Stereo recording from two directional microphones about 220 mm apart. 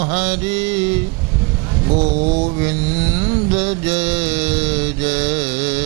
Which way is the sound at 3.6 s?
10° right (ahead or behind).